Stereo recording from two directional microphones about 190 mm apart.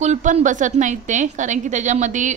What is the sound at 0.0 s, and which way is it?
Speech, 40° right (ahead or behind).